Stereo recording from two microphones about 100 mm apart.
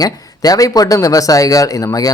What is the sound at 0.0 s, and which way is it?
A man's voice, 40° left (ahead or behind).